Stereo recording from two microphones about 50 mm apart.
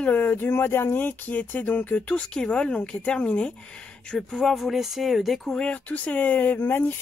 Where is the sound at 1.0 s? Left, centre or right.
Left.